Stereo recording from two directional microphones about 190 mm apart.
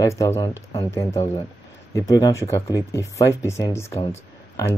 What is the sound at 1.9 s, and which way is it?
Speech, 20° left (ahead or behind).